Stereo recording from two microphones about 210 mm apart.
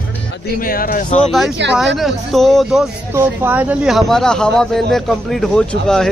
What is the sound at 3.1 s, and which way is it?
Speech, 10° right (ahead or behind).